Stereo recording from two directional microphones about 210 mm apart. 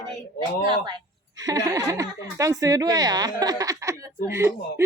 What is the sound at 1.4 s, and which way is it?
A woman's voice, 15° right (ahead or behind).